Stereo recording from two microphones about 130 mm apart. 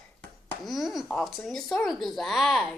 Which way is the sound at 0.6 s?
Centre (ahead or behind).